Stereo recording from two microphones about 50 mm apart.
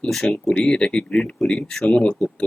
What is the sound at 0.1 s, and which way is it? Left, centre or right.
Speech, centre.